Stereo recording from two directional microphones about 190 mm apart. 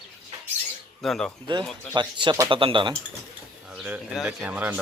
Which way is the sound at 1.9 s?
25° right (ahead or behind).